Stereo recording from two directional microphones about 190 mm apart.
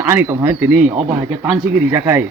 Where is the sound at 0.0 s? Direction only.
15° right (ahead or behind).